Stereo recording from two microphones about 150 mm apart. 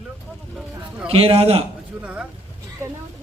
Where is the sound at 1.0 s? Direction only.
40° right (ahead or behind).